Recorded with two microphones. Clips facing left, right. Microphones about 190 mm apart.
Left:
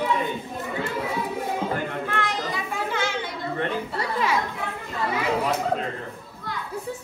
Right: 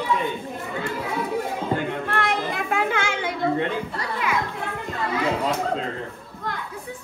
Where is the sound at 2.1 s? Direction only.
55° right (ahead or behind).